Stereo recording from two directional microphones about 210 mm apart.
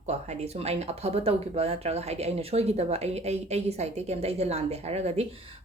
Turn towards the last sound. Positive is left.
turn(degrees=-30)  # may be behind; listen again after turning